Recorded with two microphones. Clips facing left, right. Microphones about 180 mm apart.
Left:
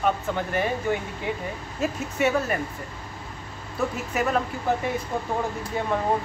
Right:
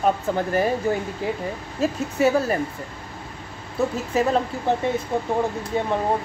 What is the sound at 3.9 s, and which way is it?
Speech, 30° right (ahead or behind).